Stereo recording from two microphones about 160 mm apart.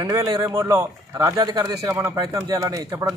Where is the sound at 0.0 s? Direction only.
25° right (ahead or behind).